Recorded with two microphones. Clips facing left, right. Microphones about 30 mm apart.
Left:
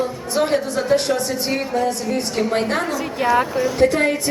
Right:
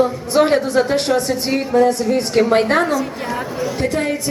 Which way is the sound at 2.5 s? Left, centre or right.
Right.